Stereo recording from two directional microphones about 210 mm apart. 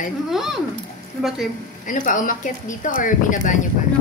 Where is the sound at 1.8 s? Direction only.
40° left (ahead or behind).